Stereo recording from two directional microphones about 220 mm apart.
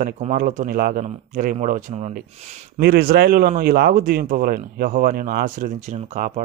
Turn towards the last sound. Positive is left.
turn(degrees=-35)  # may be behind; listen again after turning